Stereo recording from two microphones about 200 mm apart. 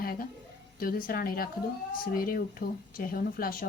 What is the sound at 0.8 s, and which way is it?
Speech, 45° left (ahead or behind).